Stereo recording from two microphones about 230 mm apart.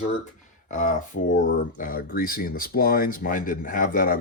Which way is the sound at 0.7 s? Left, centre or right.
Left.